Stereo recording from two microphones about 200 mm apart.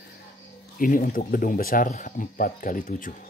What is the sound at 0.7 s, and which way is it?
Speech, 45° left (ahead or behind).